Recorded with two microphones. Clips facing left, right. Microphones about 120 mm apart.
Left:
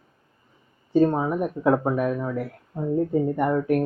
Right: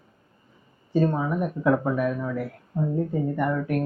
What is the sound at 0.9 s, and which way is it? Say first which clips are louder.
Speech: left 3 dB; 30° left (ahead or behind).